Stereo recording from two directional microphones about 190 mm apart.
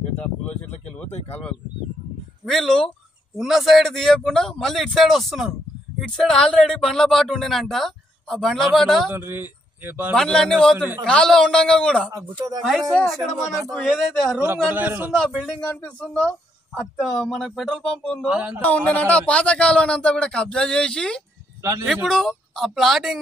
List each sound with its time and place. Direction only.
2.4 s speech: centre (ahead or behind)
9.1 s speech: 10° right (ahead or behind)
10.1 s speech: 5° left (ahead or behind)
12.1 s speech: 20° right (ahead or behind)
12.9 s speech: centre (ahead or behind)
14.4 s a man's voice: 10° right (ahead or behind)
15.1 s speech: 5° left (ahead or behind)
18.6 s speech: 5° left (ahead or behind)